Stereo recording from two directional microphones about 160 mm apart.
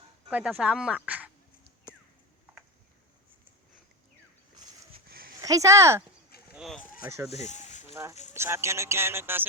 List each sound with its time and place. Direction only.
0.3 s speech: 10° right (ahead or behind)
5.0 s dog: 70° right (ahead or behind)
5.4 s speech: 20° right (ahead or behind)
6.5 s a sound: 5° right (ahead or behind)
6.7 s speech: 60° left (ahead or behind)
7.3 s a sound: 45° left (ahead or behind)
8.3 s speech: 15° right (ahead or behind)